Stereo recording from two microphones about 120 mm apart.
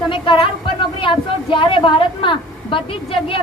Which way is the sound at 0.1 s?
45° left (ahead or behind).